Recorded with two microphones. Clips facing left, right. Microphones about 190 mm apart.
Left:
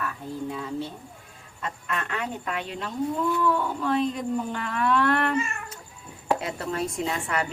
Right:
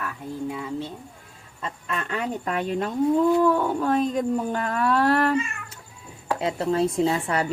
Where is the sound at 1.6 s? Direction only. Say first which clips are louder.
Right 1 dB; 30° right (ahead or behind).